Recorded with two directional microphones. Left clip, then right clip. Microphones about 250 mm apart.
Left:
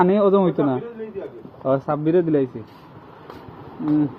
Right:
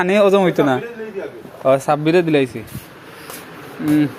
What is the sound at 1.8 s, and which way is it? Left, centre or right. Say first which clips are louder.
Speech: right 4 dB; centre.